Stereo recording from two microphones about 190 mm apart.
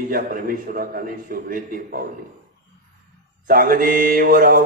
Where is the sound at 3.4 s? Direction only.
50° right (ahead or behind).